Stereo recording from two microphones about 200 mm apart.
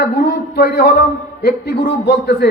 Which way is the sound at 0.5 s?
55° left (ahead or behind).